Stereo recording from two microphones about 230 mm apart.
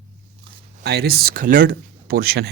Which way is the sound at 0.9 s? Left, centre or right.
Right.